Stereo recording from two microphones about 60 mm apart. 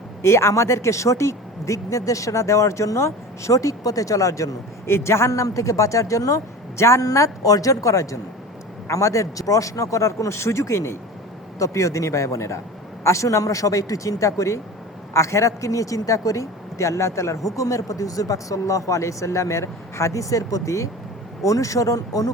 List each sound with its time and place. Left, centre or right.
0.2 s speech: left
4.9 s speech: left
7.0 s a woman's voice: left